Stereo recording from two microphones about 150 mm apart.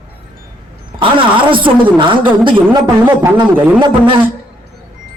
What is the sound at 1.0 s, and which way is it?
A man's voice, 35° right (ahead or behind).